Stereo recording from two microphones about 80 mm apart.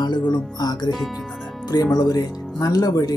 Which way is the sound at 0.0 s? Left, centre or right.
Left.